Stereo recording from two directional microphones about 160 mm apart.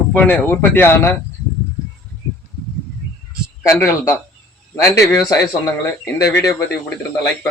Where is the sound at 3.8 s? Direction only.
15° left (ahead or behind).